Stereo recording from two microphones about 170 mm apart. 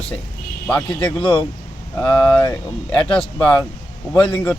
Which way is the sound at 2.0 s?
10° left (ahead or behind).